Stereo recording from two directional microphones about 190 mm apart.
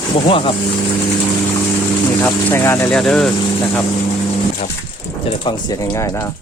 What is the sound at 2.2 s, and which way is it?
Speech, 10° left (ahead or behind).